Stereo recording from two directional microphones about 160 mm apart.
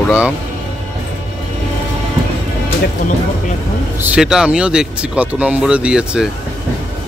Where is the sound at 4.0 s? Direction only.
5° right (ahead or behind).